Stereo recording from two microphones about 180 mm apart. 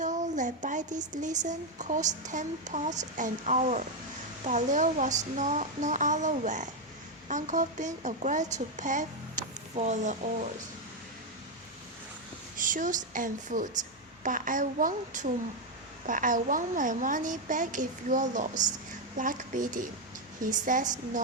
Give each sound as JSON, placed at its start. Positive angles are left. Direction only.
{"t": 0.0, "sound": "speech", "side_deg": -45}
{"t": 12.5, "sound": "speech", "side_deg": -45}